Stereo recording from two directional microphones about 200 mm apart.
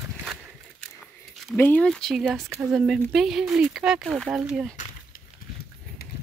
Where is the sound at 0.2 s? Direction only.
Centre (ahead or behind).